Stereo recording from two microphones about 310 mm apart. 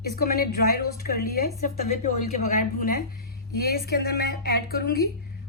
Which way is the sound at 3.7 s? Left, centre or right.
Left.